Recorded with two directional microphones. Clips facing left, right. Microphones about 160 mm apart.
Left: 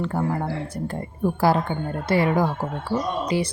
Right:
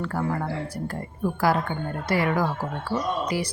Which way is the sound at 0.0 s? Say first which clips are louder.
Left 2 dB; 20° left (ahead or behind).